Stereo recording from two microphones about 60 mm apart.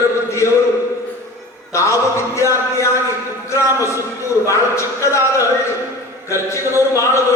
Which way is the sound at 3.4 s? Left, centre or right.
Left.